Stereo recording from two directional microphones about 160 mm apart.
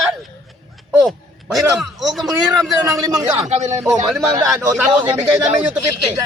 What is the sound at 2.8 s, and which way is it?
Speech, 25° right (ahead or behind).